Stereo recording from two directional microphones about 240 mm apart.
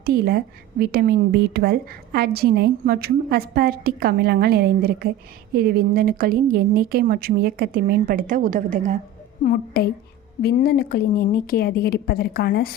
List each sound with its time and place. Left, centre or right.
0.0 s speech: right
9.4 s a woman's voice: left